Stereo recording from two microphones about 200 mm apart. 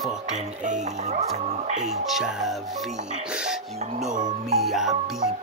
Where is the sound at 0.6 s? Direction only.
40° right (ahead or behind).